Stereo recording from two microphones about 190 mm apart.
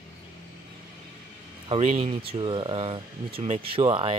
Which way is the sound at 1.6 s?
35° right (ahead or behind).